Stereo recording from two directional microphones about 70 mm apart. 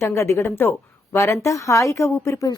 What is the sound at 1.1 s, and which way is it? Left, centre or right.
Speech, left.